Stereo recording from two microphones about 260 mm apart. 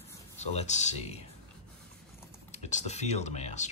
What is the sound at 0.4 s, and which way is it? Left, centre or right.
Speech, left.